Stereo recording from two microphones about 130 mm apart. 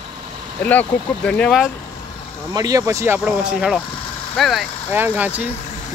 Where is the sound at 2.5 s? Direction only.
30° right (ahead or behind).